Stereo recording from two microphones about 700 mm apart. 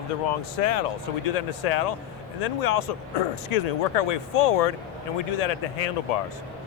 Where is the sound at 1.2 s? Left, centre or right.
Left.